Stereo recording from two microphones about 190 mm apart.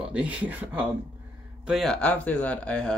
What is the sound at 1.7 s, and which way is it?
Speech, centre (ahead or behind).